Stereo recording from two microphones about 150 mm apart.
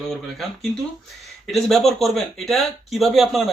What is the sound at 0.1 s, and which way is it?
Speech, centre (ahead or behind).